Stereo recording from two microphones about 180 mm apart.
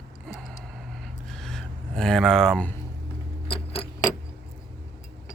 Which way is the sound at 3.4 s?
30° left (ahead or behind).